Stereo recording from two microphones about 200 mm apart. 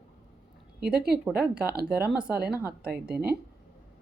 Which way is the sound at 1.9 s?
5° right (ahead or behind).